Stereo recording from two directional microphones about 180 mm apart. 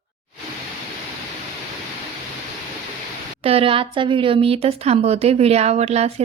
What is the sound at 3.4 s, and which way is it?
Speech, 30° right (ahead or behind).